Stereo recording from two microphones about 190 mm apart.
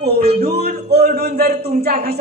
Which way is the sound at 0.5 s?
55° right (ahead or behind).